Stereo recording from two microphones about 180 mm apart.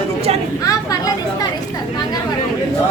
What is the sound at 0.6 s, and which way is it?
Speech, 20° left (ahead or behind).